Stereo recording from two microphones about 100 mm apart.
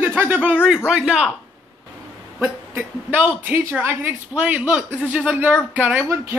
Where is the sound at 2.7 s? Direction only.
15° right (ahead or behind).